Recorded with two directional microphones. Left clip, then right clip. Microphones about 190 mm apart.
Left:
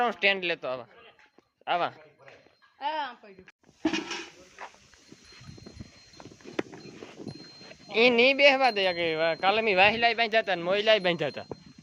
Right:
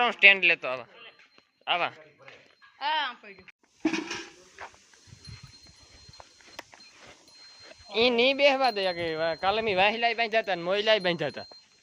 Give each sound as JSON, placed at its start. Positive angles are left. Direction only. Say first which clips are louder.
{"t": 0.0, "sound": "speech", "louder": "right 6 dB", "side_deg": 25}
{"t": 1.6, "sound": "speech", "louder": "even", "side_deg": 30}
{"t": 2.7, "sound": "speech", "louder": "right 3 dB", "side_deg": 45}
{"t": 7.9, "sound": "speech", "louder": "left 2 dB", "side_deg": 15}